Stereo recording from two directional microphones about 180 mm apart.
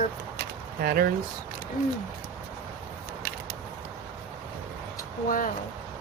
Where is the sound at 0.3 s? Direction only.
55° right (ahead or behind).